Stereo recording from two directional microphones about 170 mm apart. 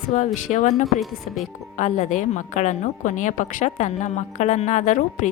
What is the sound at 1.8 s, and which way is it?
A woman's voice, 45° left (ahead or behind).